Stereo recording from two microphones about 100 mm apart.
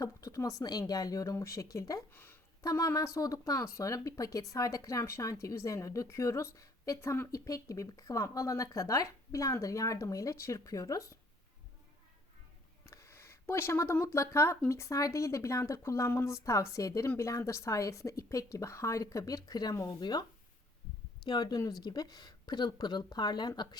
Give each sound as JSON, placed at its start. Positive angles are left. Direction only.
{"t": 0.0, "sound": "speech", "side_deg": 35}
{"t": 2.1, "sound": "a sound", "side_deg": 20}
{"t": 2.6, "sound": "speech", "side_deg": 30}
{"t": 12.8, "sound": "a sound", "side_deg": 30}
{"t": 14.7, "sound": "speech", "side_deg": 30}
{"t": 21.2, "sound": "speech", "side_deg": 45}